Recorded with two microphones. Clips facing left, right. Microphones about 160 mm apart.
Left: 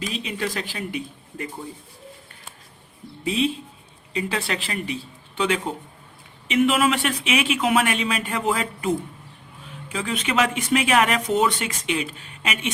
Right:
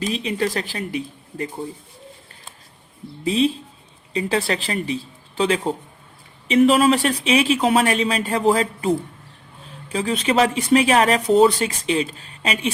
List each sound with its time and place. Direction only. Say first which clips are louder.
0.2 s speech: right 5 dB; 40° right (ahead or behind)
3.2 s speech: right 4 dB; 35° right (ahead or behind)